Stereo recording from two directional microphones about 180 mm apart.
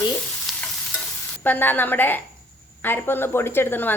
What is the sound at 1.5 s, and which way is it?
Speech, 10° left (ahead or behind).